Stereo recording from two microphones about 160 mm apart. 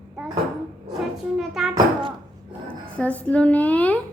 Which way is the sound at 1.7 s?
30° right (ahead or behind).